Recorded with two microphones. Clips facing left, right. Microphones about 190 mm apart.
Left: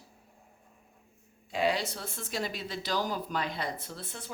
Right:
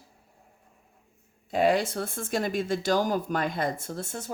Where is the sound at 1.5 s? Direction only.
50° right (ahead or behind).